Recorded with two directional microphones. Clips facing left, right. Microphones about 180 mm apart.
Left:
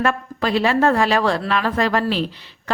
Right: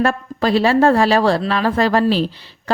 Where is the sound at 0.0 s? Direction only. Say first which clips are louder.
Right 3 dB; 35° right (ahead or behind).